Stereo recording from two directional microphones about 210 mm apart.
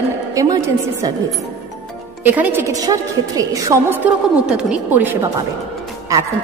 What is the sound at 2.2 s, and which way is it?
A woman's voice, 10° right (ahead or behind).